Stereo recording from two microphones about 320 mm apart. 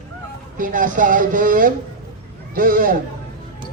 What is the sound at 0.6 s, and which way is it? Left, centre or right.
Speech, right.